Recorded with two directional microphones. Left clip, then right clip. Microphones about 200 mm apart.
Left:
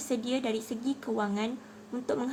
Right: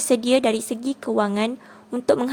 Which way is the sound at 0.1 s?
55° right (ahead or behind).